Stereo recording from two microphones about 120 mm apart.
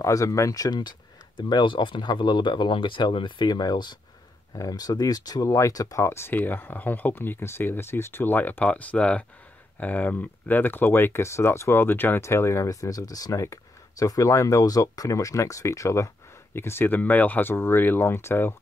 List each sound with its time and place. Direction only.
0.0 s speech: 25° left (ahead or behind)